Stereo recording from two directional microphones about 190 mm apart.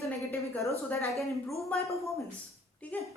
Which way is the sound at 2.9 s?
10° left (ahead or behind).